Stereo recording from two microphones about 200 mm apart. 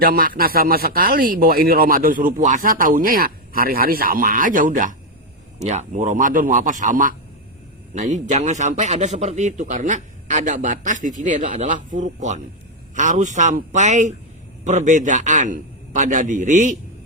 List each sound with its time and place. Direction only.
0.0 s a man's voice: 45° right (ahead or behind)